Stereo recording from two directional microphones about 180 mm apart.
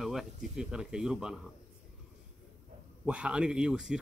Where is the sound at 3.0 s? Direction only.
5° right (ahead or behind).